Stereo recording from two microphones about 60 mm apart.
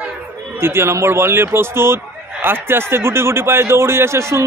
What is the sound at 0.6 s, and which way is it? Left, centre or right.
A man's voice, right.